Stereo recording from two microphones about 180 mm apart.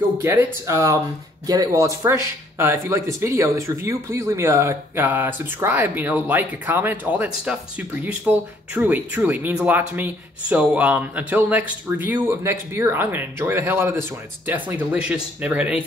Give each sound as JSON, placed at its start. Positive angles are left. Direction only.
{"t": 0.2, "sound": "speech", "side_deg": -15}